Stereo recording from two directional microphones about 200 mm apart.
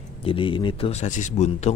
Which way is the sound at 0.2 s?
25° left (ahead or behind).